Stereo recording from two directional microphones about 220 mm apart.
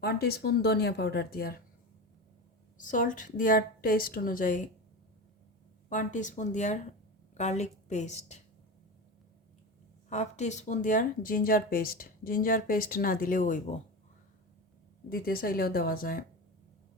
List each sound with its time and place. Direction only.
0.0 s speech: 45° left (ahead or behind)
2.7 s speech: 35° left (ahead or behind)
5.9 s speech: 35° left (ahead or behind)
10.1 s speech: 30° left (ahead or behind)
15.1 s speech: 40° left (ahead or behind)